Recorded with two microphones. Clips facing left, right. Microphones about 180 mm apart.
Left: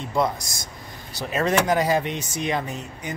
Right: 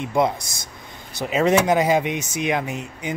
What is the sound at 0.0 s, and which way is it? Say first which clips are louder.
Speech: right 3 dB; 20° right (ahead or behind).